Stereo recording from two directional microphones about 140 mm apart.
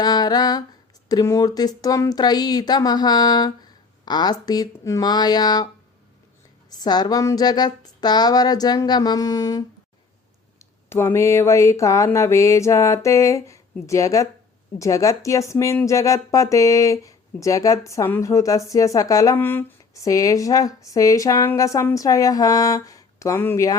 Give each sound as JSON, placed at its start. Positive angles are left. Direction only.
{"t": 0.0, "sound": "humming", "side_deg": 30}
{"t": 1.0, "sound": "speech", "side_deg": 25}
{"t": 6.7, "sound": "speech", "side_deg": 30}
{"t": 10.6, "sound": "speech", "side_deg": 20}